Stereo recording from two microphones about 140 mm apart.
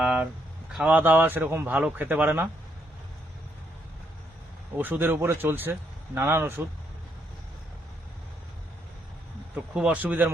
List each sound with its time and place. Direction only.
0.0 s a sound: 10° right (ahead or behind)
0.7 s speech: 10° right (ahead or behind)
4.8 s speech: 15° right (ahead or behind)
9.7 s speech: 10° right (ahead or behind)